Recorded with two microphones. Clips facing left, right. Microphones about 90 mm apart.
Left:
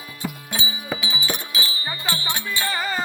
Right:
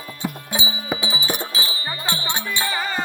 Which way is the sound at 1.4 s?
30° right (ahead or behind).